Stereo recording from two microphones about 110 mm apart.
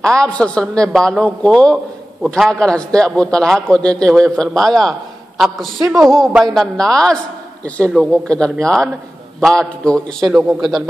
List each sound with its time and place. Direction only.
0.0 s a man's voice: 10° left (ahead or behind)